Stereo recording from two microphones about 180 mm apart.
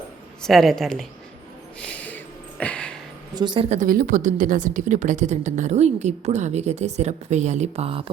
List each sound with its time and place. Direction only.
0.4 s a woman's voice: centre (ahead or behind)
1.8 s a sound: 5° left (ahead or behind)
3.3 s speech: 25° right (ahead or behind)
3.7 s speech: 50° right (ahead or behind); by 8.1 s 30° right (ahead or behind)